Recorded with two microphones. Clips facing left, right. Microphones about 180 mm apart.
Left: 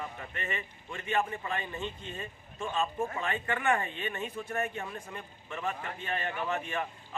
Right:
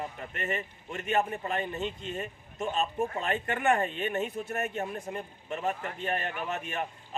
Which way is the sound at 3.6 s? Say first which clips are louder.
Right 5 dB; 40° right (ahead or behind).